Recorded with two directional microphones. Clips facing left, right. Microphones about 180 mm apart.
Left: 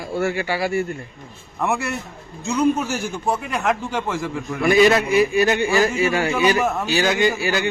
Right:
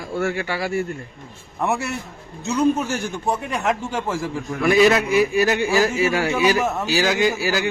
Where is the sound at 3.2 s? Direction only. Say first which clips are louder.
Left 1 dB; centre (ahead or behind).